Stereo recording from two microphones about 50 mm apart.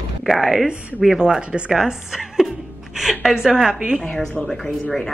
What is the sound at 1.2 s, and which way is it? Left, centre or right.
A woman's voice, centre.